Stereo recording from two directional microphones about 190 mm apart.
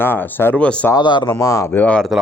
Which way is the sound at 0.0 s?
10° left (ahead or behind).